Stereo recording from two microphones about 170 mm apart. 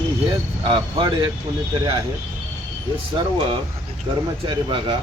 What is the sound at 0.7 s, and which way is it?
Speech, 30° right (ahead or behind).